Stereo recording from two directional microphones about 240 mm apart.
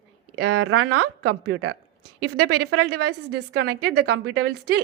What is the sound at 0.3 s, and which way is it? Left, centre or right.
A woman's voice, right.